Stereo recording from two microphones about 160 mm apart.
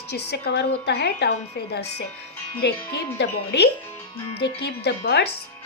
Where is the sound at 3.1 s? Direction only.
90° left.